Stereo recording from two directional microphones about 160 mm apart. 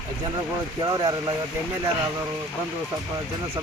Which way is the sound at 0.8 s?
25° right (ahead or behind).